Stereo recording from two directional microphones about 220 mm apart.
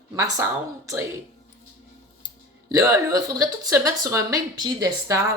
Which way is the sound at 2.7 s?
15° right (ahead or behind).